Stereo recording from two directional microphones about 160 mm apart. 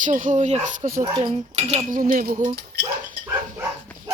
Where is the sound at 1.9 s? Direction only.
55° right (ahead or behind).